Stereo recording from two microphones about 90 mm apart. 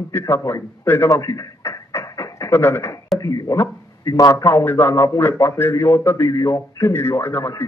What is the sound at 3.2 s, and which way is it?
A man's voice, 40° left (ahead or behind).